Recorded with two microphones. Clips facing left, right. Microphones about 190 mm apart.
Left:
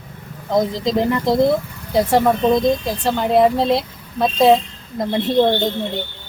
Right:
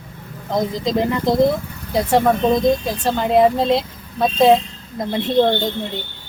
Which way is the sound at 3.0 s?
Centre (ahead or behind).